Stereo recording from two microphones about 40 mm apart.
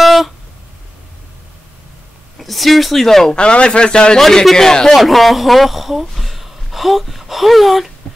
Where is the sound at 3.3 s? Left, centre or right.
Left.